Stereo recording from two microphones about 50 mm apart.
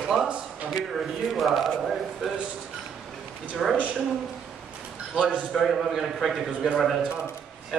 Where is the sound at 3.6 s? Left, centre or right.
Centre.